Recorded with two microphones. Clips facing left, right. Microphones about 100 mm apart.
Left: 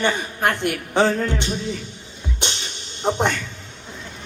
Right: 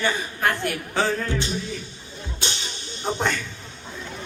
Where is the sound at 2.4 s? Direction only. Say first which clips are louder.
Left 1 dB; 20° left (ahead or behind).